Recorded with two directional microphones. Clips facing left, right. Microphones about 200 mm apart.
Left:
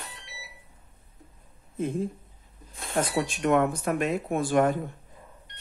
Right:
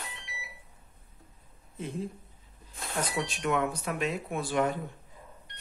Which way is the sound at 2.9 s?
50° left (ahead or behind).